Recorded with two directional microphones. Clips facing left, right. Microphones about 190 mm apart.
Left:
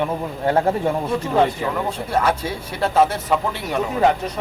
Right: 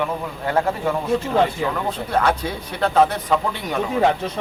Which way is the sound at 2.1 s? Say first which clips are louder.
Even; 5° left (ahead or behind).